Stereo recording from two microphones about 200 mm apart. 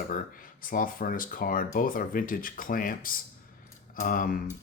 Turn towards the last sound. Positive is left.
turn(degrees=45)  # may be behind; listen again after turning